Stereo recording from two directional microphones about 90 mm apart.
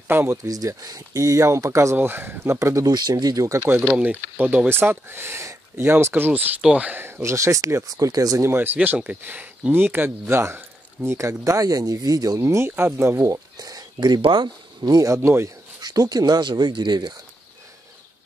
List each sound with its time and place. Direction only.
0.1 s speech: 30° right (ahead or behind)
0.5 s speech: 40° right (ahead or behind)
2.0 s speech: 25° right (ahead or behind)
2.9 s speech: 50° right (ahead or behind)
3.5 s speech: 20° right (ahead or behind); by 8.5 s 45° right (ahead or behind)
8.5 s speech: 25° right (ahead or behind); by 12.4 s 45° right (ahead or behind)
12.4 s speech: 25° right (ahead or behind); by 15.1 s 40° right (ahead or behind)
15.1 s speech: 30° right (ahead or behind)
15.8 s speech: 45° right (ahead or behind)